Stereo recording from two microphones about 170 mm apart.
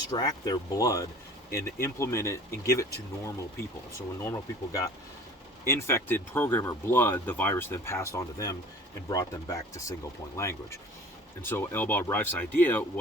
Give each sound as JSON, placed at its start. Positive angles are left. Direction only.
{"t": 0.1, "sound": "speech", "side_deg": 25}